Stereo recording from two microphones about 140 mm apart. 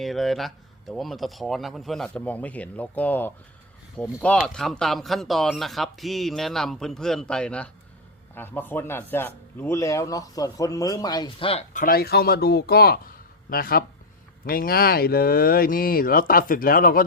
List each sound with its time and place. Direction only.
0.0 s speech: centre (ahead or behind); by 11.6 s 40° left (ahead or behind)
11.7 s speech: 80° left